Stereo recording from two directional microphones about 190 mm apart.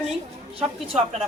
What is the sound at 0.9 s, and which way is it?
Speech, 35° right (ahead or behind).